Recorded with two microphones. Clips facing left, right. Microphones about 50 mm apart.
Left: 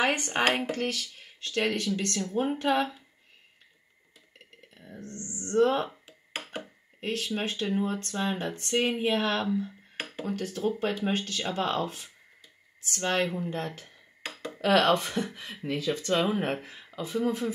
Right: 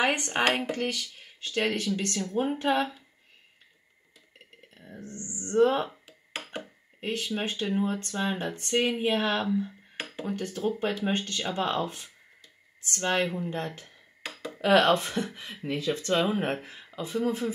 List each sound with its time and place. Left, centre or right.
0.0 s speech: centre
4.4 s speech: centre
5.9 s a sound: centre
7.8 s speech: centre
13.6 s a sound: centre
14.7 s speech: centre
15.0 s speech: centre